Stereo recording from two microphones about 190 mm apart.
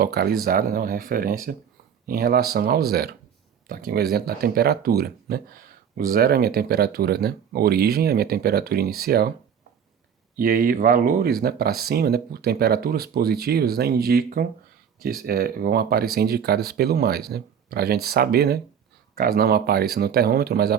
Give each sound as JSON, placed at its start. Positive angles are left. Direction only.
{"t": 0.0, "sound": "speech", "side_deg": -55}
{"t": 10.3, "sound": "speech", "side_deg": -45}